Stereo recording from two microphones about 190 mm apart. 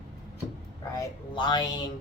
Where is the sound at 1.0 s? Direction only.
25° left (ahead or behind).